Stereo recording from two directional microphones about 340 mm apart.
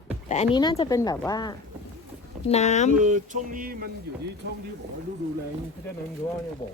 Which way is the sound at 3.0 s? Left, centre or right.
Right.